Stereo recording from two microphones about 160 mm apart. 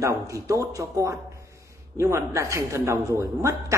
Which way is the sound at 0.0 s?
20° right (ahead or behind).